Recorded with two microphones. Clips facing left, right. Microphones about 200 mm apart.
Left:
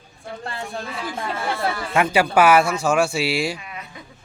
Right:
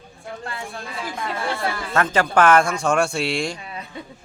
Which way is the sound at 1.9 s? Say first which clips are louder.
Left 2 dB; 10° left (ahead or behind).